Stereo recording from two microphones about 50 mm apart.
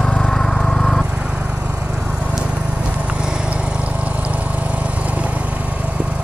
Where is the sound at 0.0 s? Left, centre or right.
Centre.